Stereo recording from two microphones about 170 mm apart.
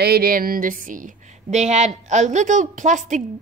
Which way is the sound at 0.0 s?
65° right (ahead or behind).